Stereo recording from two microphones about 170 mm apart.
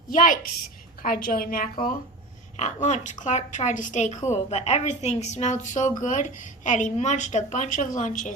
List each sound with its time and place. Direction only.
0.1 s a woman's voice: 55° left (ahead or behind)
2.6 s a woman's voice: 45° left (ahead or behind)